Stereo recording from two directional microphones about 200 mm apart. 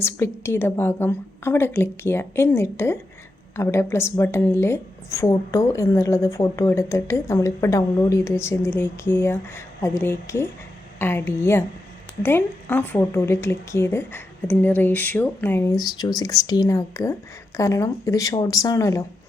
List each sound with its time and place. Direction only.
0.0 s speech: 10° left (ahead or behind)